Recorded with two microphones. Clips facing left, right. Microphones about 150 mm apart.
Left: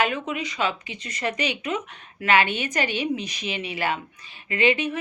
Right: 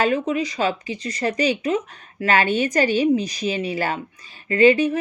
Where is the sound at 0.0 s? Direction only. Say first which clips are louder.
Right 5 dB; 35° right (ahead or behind).